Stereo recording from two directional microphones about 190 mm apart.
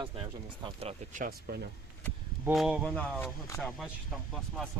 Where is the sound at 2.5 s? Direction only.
Centre (ahead or behind).